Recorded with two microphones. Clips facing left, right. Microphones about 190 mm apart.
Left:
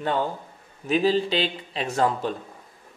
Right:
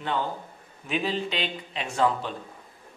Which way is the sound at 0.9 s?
35° left (ahead or behind).